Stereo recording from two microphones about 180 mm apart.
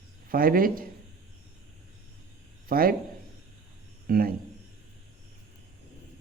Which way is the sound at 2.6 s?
55° right (ahead or behind).